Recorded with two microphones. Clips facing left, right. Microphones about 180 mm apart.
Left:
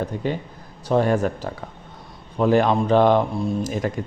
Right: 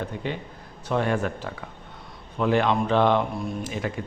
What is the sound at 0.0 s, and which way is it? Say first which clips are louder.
Speech: left 5 dB; 40° left (ahead or behind).